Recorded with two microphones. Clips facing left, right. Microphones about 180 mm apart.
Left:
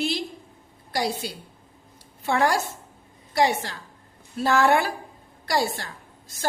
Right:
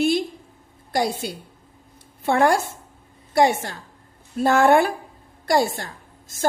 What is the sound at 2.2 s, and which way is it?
A woman's voice, 55° right (ahead or behind).